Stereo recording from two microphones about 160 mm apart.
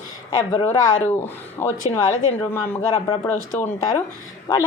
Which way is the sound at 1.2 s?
15° left (ahead or behind).